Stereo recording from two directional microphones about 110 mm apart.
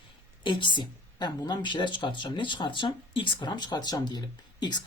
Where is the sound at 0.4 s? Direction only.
45° left (ahead or behind).